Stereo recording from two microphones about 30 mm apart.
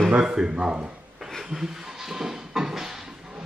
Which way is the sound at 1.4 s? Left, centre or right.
Centre.